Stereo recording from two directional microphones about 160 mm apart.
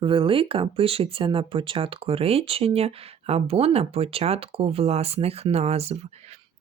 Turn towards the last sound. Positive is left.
turn(degrees=-40)  # may be behind; listen again after turning